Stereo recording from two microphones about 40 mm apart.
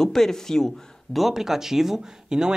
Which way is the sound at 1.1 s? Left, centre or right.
Centre.